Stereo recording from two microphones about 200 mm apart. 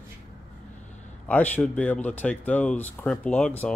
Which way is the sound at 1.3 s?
10° left (ahead or behind).